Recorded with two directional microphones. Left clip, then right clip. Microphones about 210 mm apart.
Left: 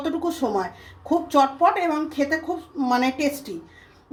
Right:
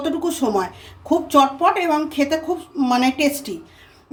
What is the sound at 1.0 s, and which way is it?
Speech, 20° right (ahead or behind).